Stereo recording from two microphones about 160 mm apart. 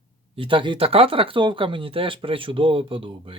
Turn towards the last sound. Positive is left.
turn(degrees=-35)  # may be behind; listen again after turning